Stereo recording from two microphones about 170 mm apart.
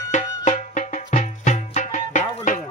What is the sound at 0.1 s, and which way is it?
Music, 45° left (ahead or behind).